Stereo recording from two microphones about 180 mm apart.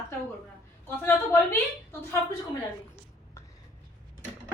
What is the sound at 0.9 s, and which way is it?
Speech, 10° left (ahead or behind).